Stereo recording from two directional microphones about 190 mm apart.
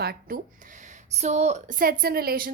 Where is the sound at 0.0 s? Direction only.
50° right (ahead or behind).